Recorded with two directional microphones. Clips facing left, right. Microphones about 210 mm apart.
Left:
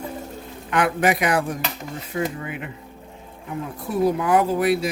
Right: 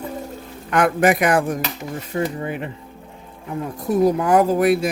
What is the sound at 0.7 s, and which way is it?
Speech, 45° right (ahead or behind).